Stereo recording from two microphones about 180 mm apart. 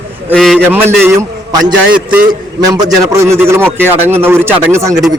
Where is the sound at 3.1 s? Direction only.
15° right (ahead or behind).